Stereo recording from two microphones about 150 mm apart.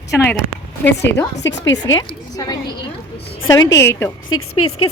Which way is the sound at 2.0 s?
25° left (ahead or behind).